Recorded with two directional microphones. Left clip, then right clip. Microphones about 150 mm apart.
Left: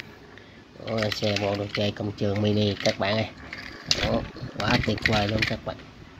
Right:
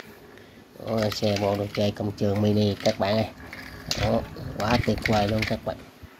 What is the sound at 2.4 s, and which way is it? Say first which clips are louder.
Speech: even; 10° right (ahead or behind).